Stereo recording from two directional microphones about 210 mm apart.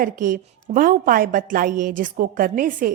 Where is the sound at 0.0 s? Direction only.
40° right (ahead or behind).